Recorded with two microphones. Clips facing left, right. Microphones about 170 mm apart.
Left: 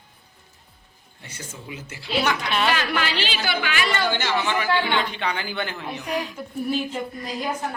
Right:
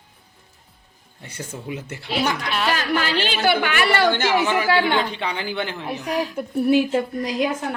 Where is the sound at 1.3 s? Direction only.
55° right (ahead or behind).